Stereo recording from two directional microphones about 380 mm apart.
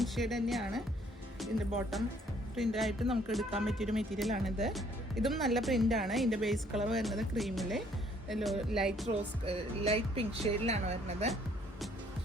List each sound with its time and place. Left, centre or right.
0.0 s speech: centre
1.9 s speech: centre
9.0 s a woman's voice: centre